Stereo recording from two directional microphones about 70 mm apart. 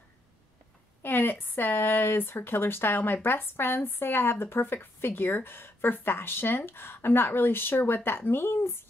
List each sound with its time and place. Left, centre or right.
1.0 s speech: left